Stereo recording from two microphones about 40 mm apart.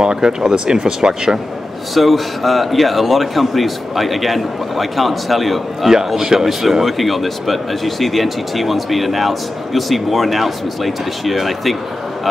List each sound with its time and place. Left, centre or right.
0.0 s speech: centre
2.0 s speech: centre
6.0 s speech: centre